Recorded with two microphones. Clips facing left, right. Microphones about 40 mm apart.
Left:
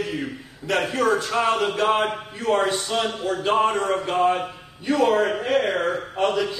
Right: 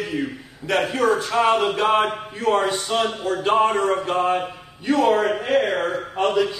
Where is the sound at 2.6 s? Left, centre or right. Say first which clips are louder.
Right 2 dB; centre.